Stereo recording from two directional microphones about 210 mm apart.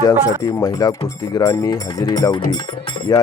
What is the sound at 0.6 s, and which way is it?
Speech, 15° left (ahead or behind).